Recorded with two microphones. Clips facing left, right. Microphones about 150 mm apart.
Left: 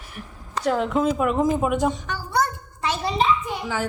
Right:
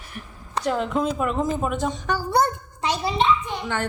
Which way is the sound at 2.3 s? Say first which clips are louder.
Even; 25° right (ahead or behind).